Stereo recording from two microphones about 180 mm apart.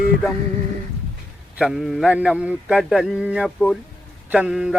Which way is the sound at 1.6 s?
Centre (ahead or behind).